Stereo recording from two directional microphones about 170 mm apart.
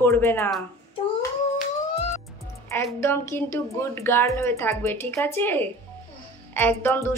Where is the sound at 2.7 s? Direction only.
15° left (ahead or behind).